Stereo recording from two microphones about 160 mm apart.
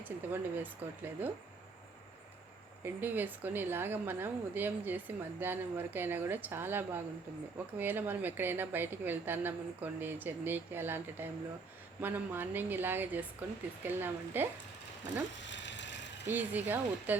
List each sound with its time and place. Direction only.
0.0 s a woman's voice: 10° right (ahead or behind)
2.8 s a woman's voice: 10° right (ahead or behind)
15.6 s a sound: 90° left
16.2 s a woman's voice: 10° right (ahead or behind)